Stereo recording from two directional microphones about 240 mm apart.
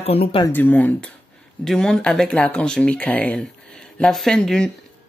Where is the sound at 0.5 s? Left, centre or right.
Centre.